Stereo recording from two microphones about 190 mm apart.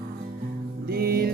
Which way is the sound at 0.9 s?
55° right (ahead or behind).